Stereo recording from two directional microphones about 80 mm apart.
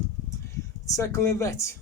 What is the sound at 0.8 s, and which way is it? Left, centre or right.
Speech, left.